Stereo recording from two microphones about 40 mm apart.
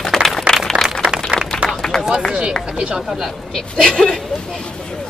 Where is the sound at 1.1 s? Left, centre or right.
Right.